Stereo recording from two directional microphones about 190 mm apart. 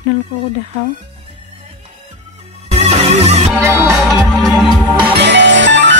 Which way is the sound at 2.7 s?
35° right (ahead or behind).